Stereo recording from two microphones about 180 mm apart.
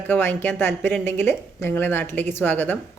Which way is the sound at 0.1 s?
10° left (ahead or behind).